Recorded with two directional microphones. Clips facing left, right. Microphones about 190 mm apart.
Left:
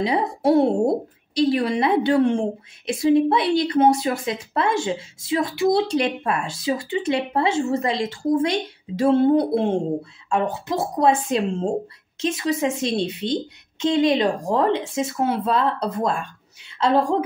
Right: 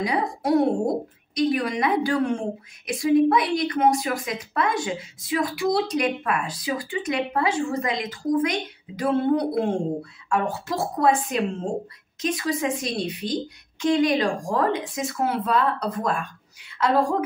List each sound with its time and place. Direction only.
0.0 s a woman's voice: 25° left (ahead or behind)